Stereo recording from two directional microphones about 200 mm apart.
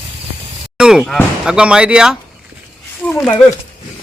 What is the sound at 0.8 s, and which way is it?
Speech, 5° right (ahead or behind).